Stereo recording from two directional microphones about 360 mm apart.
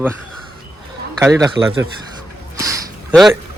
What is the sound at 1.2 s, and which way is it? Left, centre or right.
Speech, centre.